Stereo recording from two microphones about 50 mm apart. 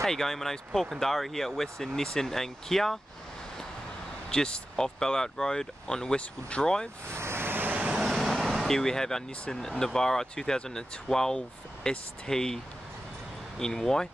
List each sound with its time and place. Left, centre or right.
0.0 s speech: centre
4.3 s speech: centre
7.1 s vehicle: right
8.0 s vehicle: centre
9.5 s speech: centre
13.6 s speech: centre